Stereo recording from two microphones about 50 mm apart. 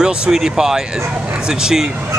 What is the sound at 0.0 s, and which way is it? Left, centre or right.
Speech, centre.